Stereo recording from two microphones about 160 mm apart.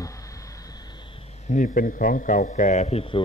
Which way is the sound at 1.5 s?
55° left (ahead or behind).